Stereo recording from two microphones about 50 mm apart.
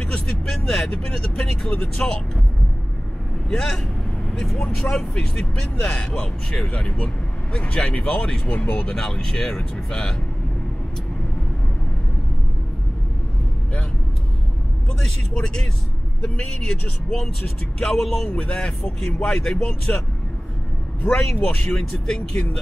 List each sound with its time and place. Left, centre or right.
0.0 s vehicle: centre
0.5 s speech: centre
3.4 s speech: centre
8.5 s speech: left
8.8 s speech: centre
15.0 s speech: centre
18.3 s speech: left
18.8 s speech: centre
21.1 s speech: centre